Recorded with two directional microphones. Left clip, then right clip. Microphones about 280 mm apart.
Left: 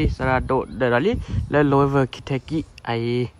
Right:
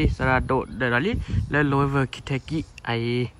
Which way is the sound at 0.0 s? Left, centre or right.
Centre.